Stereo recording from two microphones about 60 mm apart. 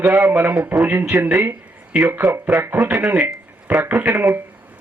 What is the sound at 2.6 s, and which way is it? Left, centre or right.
Speech, right.